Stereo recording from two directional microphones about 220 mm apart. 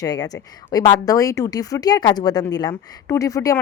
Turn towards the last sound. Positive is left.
turn(degrees=15)  # may be behind; listen again after turning